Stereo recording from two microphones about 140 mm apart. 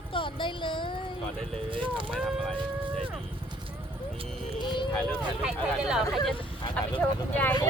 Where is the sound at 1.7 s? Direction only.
35° right (ahead or behind).